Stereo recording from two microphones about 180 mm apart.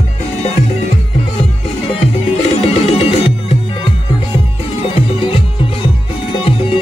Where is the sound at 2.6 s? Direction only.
35° left (ahead or behind).